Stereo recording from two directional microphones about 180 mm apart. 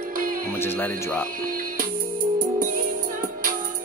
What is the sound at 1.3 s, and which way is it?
Music, 50° right (ahead or behind).